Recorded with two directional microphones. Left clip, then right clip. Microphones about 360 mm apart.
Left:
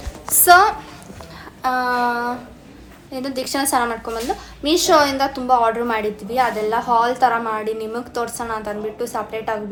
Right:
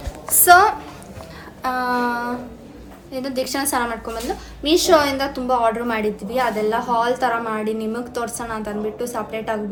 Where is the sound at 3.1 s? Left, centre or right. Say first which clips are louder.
Even; centre.